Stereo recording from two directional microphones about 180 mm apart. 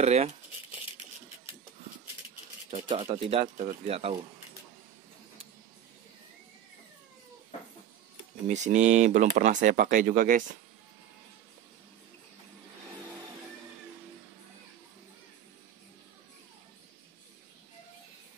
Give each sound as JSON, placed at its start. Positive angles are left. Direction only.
{"t": 0.0, "sound": "speech", "side_deg": -35}
{"t": 2.7, "sound": "speech", "side_deg": -35}
{"t": 8.5, "sound": "speech", "side_deg": -40}